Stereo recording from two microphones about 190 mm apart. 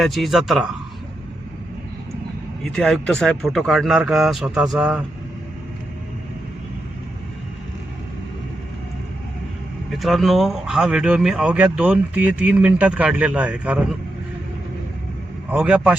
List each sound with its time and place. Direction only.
0.0 s speech: centre (ahead or behind)
2.7 s speech: 5° left (ahead or behind)
9.9 s speech: centre (ahead or behind)
15.4 s a man's voice: 5° right (ahead or behind)